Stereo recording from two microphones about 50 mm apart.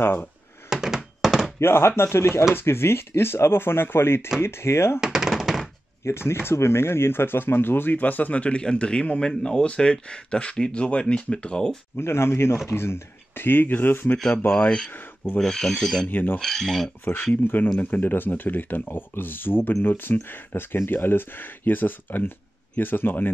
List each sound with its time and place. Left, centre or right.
0.7 s a sound: centre
1.2 s thunk: centre
1.6 s speech: left
5.0 s chopping: centre
6.0 s speech: left; by 11.8 s centre
12.0 s speech: left
15.4 s speech: centre
16.1 s speech: left
16.3 s speech: centre
17.0 s speech: left